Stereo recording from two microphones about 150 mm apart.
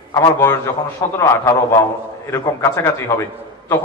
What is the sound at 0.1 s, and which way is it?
A man's voice, 20° left (ahead or behind).